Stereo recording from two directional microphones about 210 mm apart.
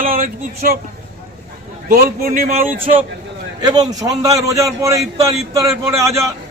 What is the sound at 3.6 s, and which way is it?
A man's voice, 20° right (ahead or behind).